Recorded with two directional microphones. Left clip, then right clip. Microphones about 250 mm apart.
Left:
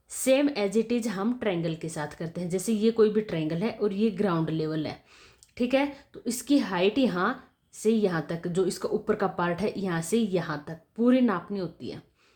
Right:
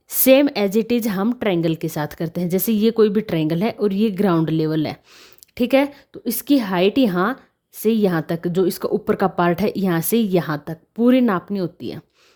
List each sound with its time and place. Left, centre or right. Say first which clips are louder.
0.1 s a woman's voice: right 10 dB; right